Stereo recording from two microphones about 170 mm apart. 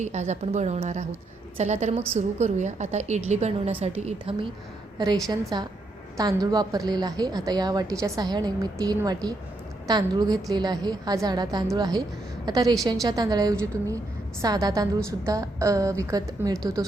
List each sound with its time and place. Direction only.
0.0 s a woman's voice: 40° right (ahead or behind)
5.3 s a woman's voice: 25° right (ahead or behind)